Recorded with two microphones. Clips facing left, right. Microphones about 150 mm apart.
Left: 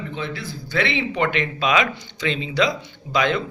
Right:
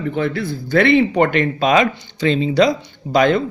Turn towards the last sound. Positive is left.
turn(degrees=-45)  # may be behind; listen again after turning